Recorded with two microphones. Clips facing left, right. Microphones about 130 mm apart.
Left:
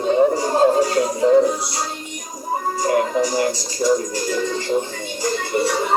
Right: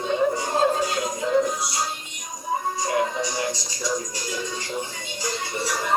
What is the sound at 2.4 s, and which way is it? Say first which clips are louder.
Music: left 5 dB; 50° left (ahead or behind).